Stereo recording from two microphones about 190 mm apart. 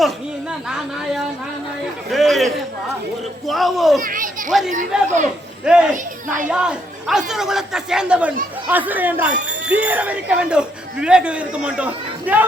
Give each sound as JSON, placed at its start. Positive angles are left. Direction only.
{"t": 0.7, "sound": "a man's voice", "side_deg": 0}
{"t": 4.0, "sound": "children playing", "side_deg": -45}
{"t": 4.9, "sound": "a man's voice", "side_deg": -5}
{"t": 5.9, "sound": "a child's voice", "side_deg": -40}
{"t": 6.5, "sound": "a man's voice", "side_deg": -5}